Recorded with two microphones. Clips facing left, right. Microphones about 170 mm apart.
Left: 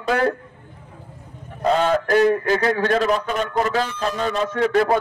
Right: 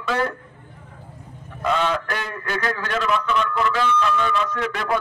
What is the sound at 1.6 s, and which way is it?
A man's voice, 40° left (ahead or behind).